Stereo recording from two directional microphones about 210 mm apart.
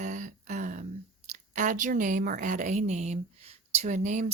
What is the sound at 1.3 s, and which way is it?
A woman's voice, 35° right (ahead or behind).